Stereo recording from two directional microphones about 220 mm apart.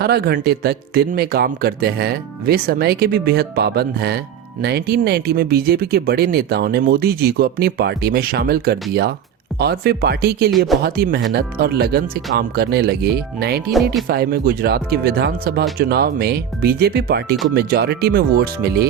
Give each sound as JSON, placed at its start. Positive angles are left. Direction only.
{"t": 0.0, "sound": "speech", "side_deg": -45}